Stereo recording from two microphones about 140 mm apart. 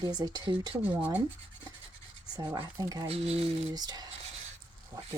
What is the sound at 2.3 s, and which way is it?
Speech, 25° right (ahead or behind).